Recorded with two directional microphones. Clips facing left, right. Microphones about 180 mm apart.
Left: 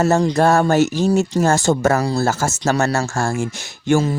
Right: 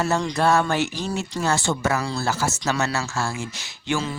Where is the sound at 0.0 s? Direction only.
45° left (ahead or behind).